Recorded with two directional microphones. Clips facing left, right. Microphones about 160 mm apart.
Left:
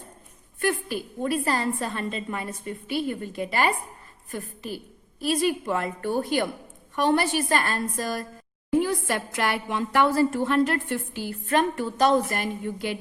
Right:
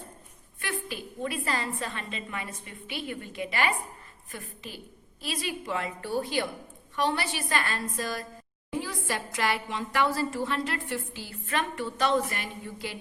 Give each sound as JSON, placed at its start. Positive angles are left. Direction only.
{"t": 0.6, "sound": "a woman's voice", "side_deg": 45}
{"t": 8.8, "sound": "a woman's voice", "side_deg": 60}